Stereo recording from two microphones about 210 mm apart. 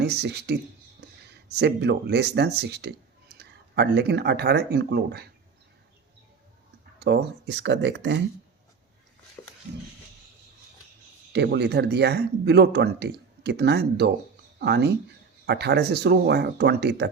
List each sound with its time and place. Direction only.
0.0 s speech: 50° right (ahead or behind)
7.0 s speech: 50° right (ahead or behind)
9.4 s dog: 15° left (ahead or behind)
11.3 s speech: 55° right (ahead or behind)